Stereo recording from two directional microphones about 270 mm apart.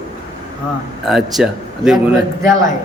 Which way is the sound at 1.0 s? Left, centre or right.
Centre.